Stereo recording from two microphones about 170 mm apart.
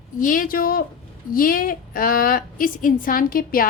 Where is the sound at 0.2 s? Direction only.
50° left (ahead or behind).